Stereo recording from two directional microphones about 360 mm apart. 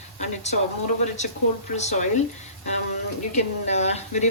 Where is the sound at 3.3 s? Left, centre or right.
Centre.